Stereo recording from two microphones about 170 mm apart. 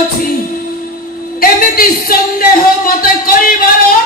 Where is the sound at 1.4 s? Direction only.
60° left (ahead or behind).